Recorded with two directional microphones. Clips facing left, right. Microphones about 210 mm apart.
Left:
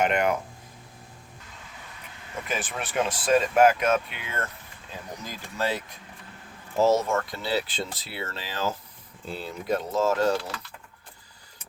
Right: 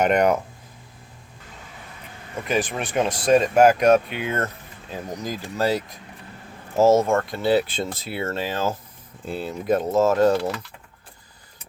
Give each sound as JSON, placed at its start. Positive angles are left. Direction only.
{"t": 0.0, "sound": "speech", "side_deg": -40}
{"t": 2.5, "sound": "speech", "side_deg": -35}